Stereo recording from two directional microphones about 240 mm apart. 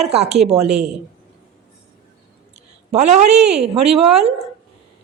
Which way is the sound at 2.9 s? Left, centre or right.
Right.